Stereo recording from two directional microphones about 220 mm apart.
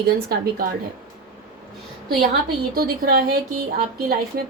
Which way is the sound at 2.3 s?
45° right (ahead or behind).